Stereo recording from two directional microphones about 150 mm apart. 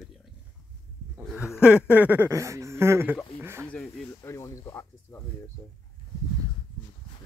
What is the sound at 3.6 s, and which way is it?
Speech, 5° left (ahead or behind).